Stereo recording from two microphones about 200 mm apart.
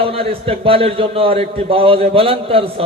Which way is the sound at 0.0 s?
30° right (ahead or behind).